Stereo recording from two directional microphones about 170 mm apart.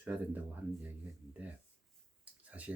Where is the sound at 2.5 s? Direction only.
10° right (ahead or behind).